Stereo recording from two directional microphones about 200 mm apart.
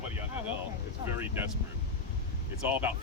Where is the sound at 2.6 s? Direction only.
10° right (ahead or behind).